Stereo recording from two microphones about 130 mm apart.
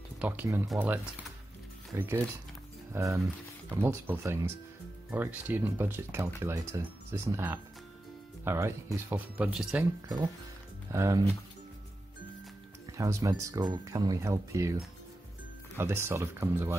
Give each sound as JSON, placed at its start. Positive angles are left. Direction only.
{"t": 0.2, "sound": "speech", "side_deg": -15}
{"t": 10.9, "sound": "speech", "side_deg": -25}
{"t": 12.9, "sound": "speech", "side_deg": -25}
{"t": 15.7, "sound": "speech", "side_deg": -20}